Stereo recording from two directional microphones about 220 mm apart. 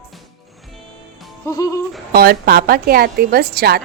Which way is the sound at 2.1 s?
45° right (ahead or behind).